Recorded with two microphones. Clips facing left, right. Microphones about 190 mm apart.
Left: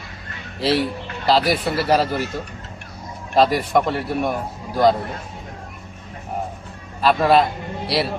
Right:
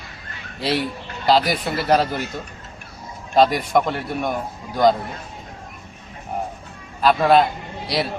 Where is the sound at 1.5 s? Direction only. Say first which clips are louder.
Left 1 dB; 5° left (ahead or behind).